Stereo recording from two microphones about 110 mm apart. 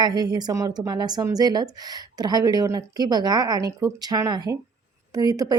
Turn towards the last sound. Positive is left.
turn(degrees=-35)  # may be behind; listen again after turning